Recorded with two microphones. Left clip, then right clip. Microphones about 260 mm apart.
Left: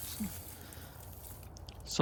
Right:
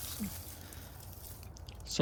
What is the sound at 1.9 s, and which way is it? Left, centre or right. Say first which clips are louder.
Pour: left 1 dB; centre.